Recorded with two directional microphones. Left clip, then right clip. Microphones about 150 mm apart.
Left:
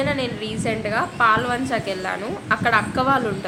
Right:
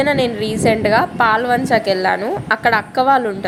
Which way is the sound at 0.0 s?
40° right (ahead or behind).